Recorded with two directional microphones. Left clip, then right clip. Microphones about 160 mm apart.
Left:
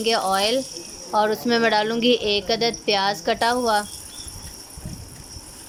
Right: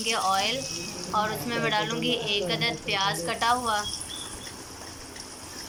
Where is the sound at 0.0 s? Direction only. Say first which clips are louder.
Left 5 dB; 60° left (ahead or behind).